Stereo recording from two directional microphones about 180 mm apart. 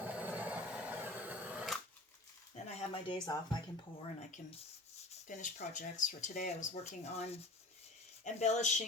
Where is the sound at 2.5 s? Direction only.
40° left (ahead or behind).